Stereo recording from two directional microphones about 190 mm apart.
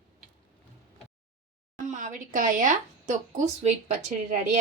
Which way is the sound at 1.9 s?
40° right (ahead or behind).